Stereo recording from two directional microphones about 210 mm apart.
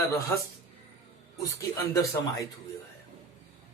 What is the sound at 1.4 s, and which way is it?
A man's voice, 15° left (ahead or behind).